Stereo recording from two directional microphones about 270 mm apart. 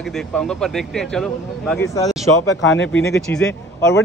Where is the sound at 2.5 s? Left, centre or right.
Left.